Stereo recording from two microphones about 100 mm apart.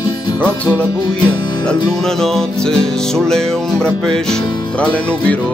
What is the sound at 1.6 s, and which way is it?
Music, 5° left (ahead or behind).